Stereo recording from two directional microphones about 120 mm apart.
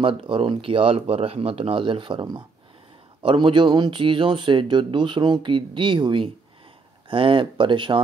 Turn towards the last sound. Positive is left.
turn(degrees=-45)  # may be behind; listen again after turning